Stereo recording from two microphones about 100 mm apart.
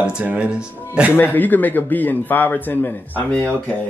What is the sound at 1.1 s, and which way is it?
A man's voice, 20° left (ahead or behind).